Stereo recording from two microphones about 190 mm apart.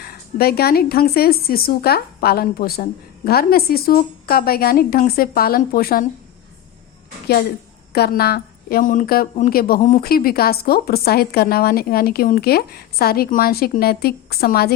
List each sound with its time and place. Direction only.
0.0 s speech: 55° left (ahead or behind)
7.9 s speech: 55° left (ahead or behind)